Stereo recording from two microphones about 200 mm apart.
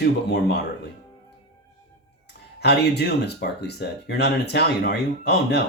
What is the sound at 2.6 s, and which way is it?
Speech, 55° left (ahead or behind).